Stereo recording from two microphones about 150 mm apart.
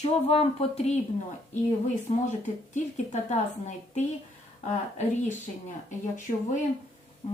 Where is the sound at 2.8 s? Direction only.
50° left (ahead or behind).